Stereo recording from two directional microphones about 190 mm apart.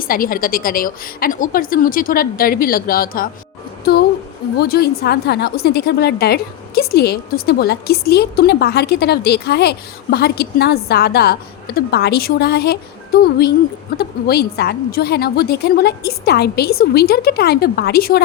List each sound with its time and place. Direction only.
0.1 s a woman's voice: 50° left (ahead or behind)
4.5 s a woman's voice: 55° left (ahead or behind)